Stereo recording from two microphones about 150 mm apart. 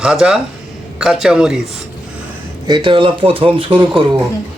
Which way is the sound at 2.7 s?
30° right (ahead or behind).